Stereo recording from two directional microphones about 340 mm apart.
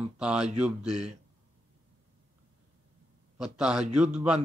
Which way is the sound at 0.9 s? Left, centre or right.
Centre.